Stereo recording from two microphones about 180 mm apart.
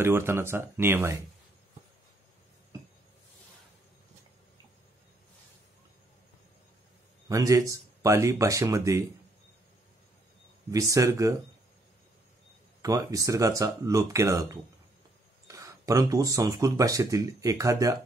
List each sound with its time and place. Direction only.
0.0 s speech: 15° right (ahead or behind)
7.2 s speech: 20° right (ahead or behind)
10.7 s speech: 20° right (ahead or behind)
12.8 s speech: 20° right (ahead or behind)